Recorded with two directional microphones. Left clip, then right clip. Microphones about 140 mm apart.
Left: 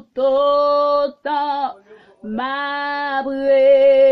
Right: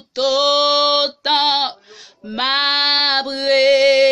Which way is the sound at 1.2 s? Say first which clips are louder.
Right 4 dB; 10° right (ahead or behind).